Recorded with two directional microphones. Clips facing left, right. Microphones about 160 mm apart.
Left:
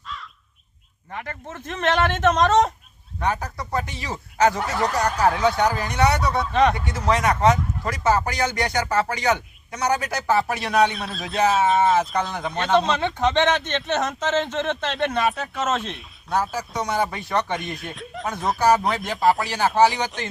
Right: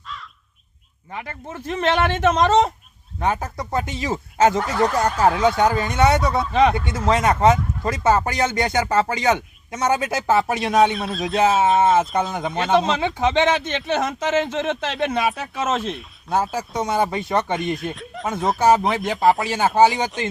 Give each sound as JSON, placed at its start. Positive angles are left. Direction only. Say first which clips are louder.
{"t": 1.1, "sound": "speech", "louder": "right 1 dB", "side_deg": -10}
{"t": 3.2, "sound": "speech", "louder": "right 2 dB", "side_deg": -25}
{"t": 6.4, "sound": "speech", "louder": "even", "side_deg": -5}
{"t": 6.9, "sound": "speech", "louder": "right 2 dB", "side_deg": -25}
{"t": 10.9, "sound": "speech", "louder": "right 6 dB", "side_deg": 0}
{"t": 12.5, "sound": "speech", "louder": "even", "side_deg": -5}
{"t": 16.3, "sound": "speech", "louder": "right 2 dB", "side_deg": -25}
{"t": 17.7, "sound": "speech", "louder": "right 4 dB", "side_deg": 0}
{"t": 18.6, "sound": "speech", "louder": "right 2 dB", "side_deg": -25}
{"t": 19.1, "sound": "speech", "louder": "right 2 dB", "side_deg": 0}
{"t": 19.4, "sound": "speech", "louder": "right 2 dB", "side_deg": -20}